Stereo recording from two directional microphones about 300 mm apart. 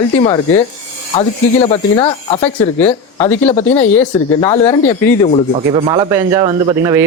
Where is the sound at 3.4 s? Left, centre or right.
Left.